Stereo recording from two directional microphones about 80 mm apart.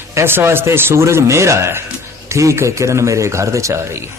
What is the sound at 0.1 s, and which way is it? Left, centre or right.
Speech, right.